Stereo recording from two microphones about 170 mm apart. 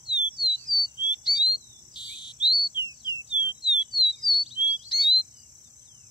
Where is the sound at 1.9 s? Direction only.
25° left (ahead or behind).